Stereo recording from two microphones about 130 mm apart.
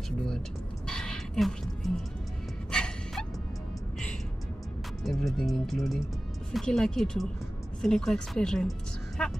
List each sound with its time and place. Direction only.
0.8 s speech: 5° left (ahead or behind)
2.7 s gasp: 5° left (ahead or behind)
5.0 s speech: centre (ahead or behind)